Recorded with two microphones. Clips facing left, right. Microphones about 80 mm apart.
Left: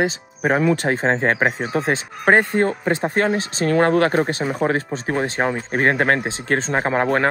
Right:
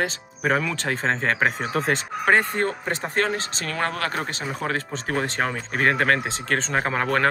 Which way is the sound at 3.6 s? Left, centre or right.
Left.